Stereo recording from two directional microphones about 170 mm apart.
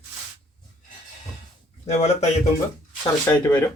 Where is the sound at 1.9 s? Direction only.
40° left (ahead or behind).